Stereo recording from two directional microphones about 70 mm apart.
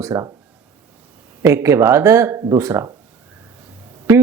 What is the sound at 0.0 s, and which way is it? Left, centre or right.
Speech, right.